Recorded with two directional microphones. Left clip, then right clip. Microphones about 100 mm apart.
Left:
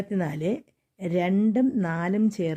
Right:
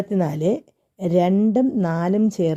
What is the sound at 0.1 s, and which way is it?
A woman's voice, 35° right (ahead or behind).